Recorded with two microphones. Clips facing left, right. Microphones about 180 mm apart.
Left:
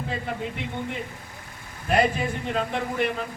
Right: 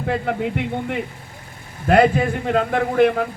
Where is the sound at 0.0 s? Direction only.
65° right (ahead or behind).